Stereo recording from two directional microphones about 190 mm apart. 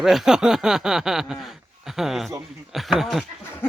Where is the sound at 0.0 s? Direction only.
Centre (ahead or behind).